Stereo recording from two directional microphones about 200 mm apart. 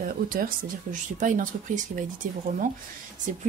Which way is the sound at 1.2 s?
40° right (ahead or behind).